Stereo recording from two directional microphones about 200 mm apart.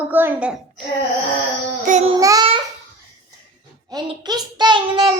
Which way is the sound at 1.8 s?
40° right (ahead or behind).